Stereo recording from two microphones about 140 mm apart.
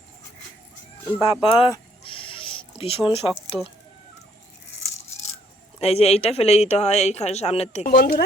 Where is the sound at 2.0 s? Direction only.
40° left (ahead or behind).